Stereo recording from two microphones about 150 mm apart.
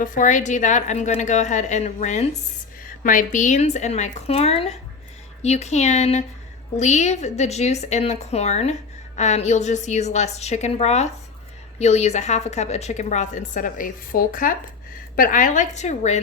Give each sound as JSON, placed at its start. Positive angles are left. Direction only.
{"t": 0.0, "sound": "a woman's voice", "side_deg": 60}
{"t": 3.0, "sound": "a woman's voice", "side_deg": 60}